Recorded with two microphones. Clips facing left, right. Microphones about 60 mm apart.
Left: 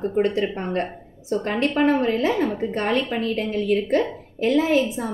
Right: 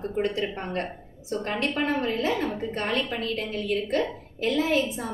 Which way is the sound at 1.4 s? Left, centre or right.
Left.